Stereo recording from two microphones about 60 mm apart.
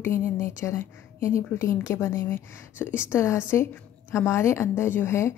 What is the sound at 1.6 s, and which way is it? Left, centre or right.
A woman's voice, left.